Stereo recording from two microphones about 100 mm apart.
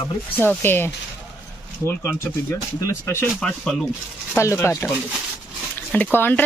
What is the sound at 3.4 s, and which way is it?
Speech, 10° left (ahead or behind).